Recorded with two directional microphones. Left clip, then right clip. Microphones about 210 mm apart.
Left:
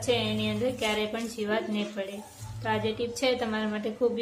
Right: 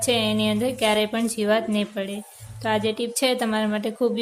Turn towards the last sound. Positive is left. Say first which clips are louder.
# right 4 dB
turn(degrees=-45)  # may be behind; listen again after turning